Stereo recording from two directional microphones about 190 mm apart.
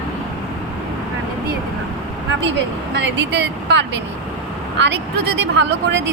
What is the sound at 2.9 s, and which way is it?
A woman's voice, 65° right (ahead or behind).